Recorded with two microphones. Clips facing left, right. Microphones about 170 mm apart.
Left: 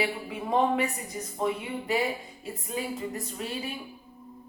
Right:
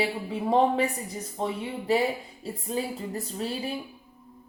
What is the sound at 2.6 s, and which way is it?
A woman's voice, 30° right (ahead or behind).